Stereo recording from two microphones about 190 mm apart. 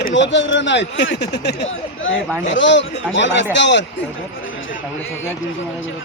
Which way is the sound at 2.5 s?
75° left (ahead or behind).